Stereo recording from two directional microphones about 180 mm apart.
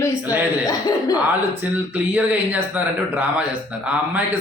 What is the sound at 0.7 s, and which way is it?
Speech, 20° left (ahead or behind).